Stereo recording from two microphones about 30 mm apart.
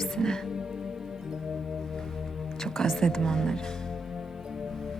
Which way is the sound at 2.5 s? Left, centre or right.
Centre.